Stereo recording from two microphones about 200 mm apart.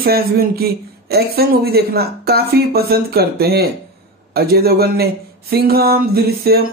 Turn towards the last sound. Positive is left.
turn(degrees=-50)  # may be behind; listen again after turning